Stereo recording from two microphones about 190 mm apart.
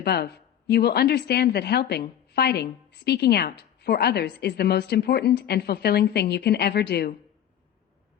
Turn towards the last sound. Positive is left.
turn(degrees=60)  # may be behind; listen again after turning